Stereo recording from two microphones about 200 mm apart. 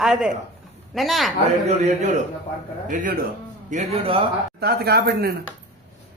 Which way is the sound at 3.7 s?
30° right (ahead or behind).